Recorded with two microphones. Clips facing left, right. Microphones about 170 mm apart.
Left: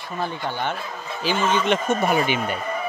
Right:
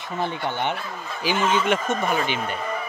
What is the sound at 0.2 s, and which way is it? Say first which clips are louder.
Speech: right 1 dB; 20° right (ahead or behind).